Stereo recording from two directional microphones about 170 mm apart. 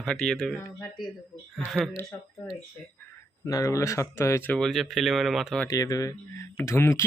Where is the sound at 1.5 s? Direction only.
Centre (ahead or behind).